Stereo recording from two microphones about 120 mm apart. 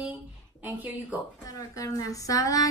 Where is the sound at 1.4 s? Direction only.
30° left (ahead or behind).